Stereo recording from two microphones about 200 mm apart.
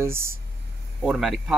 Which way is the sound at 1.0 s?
Centre (ahead or behind).